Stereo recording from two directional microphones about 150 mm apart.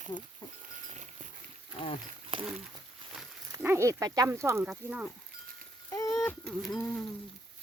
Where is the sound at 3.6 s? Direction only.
15° right (ahead or behind).